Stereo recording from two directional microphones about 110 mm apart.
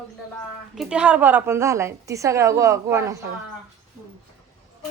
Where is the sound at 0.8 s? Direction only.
10° right (ahead or behind); by 3.2 s 30° right (ahead or behind).